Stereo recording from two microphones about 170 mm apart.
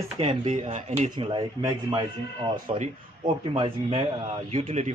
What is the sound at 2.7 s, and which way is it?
Speech, 40° right (ahead or behind).